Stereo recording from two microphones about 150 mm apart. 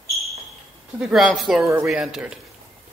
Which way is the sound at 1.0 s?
Centre (ahead or behind).